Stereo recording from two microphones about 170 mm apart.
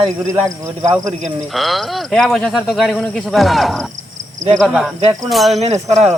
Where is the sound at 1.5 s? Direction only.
Centre (ahead or behind).